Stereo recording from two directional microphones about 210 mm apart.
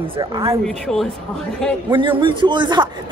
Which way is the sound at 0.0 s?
25° right (ahead or behind).